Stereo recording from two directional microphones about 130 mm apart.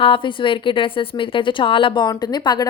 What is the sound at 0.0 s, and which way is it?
A woman's voice, 40° left (ahead or behind).